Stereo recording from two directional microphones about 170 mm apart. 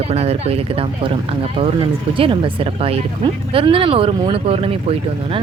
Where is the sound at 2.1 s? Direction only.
30° right (ahead or behind).